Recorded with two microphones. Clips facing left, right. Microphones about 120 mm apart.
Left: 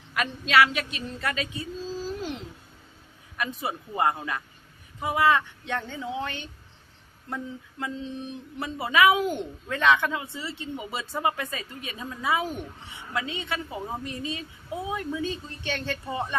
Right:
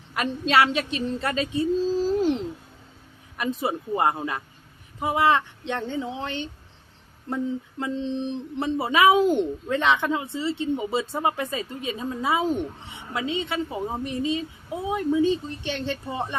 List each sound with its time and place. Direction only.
0.1 s speech: 30° right (ahead or behind)
3.3 s speech: 25° right (ahead or behind)